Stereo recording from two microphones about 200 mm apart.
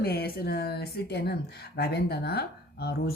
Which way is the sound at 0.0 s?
50° left (ahead or behind).